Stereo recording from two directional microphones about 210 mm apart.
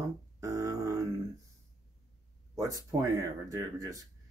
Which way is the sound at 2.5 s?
15° right (ahead or behind).